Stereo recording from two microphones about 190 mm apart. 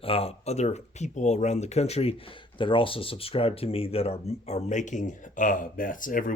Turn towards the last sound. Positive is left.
turn(degrees=45)  # may be behind; listen again after turning